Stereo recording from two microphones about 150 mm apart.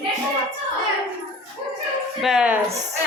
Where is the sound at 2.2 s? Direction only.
5° right (ahead or behind).